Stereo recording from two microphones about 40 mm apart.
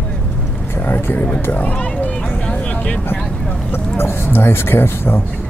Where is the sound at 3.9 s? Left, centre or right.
Left.